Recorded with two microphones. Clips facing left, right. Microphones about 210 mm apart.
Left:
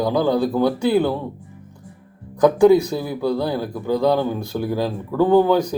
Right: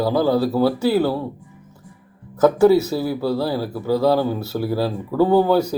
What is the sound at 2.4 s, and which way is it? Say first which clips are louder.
Speech: left 1 dB; 5° right (ahead or behind).